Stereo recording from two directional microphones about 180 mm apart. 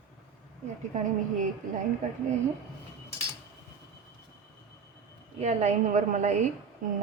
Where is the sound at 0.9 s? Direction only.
40° right (ahead or behind).